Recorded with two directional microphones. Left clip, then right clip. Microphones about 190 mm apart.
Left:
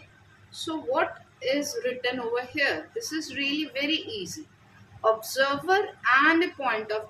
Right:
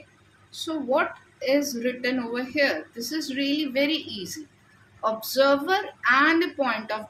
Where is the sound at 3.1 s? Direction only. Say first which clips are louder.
Right 3 dB; 60° right (ahead or behind).